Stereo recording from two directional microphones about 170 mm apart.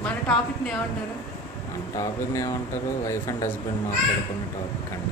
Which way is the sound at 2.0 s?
20° left (ahead or behind).